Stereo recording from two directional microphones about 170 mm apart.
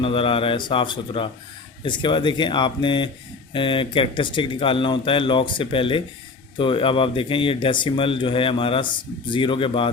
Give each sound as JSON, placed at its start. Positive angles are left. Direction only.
{"t": 0.0, "sound": "speech", "side_deg": 30}